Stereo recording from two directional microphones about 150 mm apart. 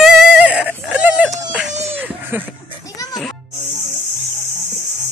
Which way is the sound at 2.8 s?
25° left (ahead or behind).